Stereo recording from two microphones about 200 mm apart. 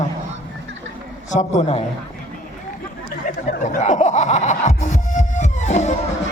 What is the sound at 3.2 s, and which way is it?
Music, 35° left (ahead or behind).